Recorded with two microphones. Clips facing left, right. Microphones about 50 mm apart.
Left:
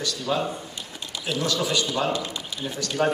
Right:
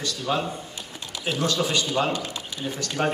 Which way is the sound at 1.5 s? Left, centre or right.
Right.